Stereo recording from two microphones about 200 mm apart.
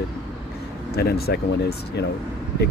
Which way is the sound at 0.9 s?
50° left (ahead or behind).